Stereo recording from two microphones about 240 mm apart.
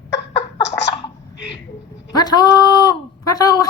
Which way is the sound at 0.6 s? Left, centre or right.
Left.